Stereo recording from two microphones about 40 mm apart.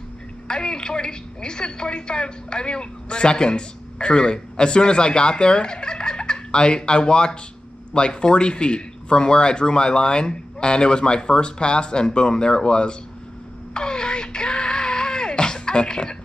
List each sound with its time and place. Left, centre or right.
0.5 s a woman's voice: centre
13.7 s music: centre